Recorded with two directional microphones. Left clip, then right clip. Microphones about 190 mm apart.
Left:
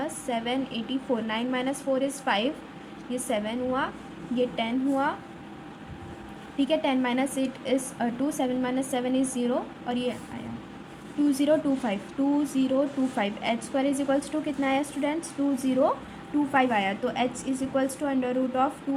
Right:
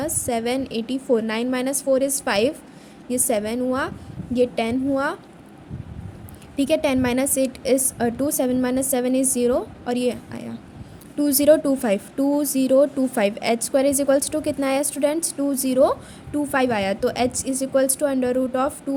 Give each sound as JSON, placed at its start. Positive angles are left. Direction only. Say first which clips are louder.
{"t": 0.0, "sound": "a woman's voice", "louder": "right 6 dB", "side_deg": -65}
{"t": 6.6, "sound": "a woman's voice", "louder": "right 5 dB", "side_deg": -70}
{"t": 11.3, "sound": "a woman's voice", "louder": "right 8 dB", "side_deg": -80}
{"t": 16.5, "sound": "a woman's voice", "louder": "right 3 dB", "side_deg": -60}